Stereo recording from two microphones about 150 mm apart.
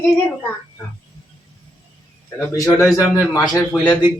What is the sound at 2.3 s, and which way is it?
A man's voice, 20° left (ahead or behind).